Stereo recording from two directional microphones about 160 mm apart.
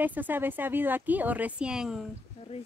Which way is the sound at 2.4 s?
40° left (ahead or behind).